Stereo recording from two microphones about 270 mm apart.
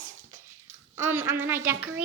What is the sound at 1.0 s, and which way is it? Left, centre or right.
Speech, centre.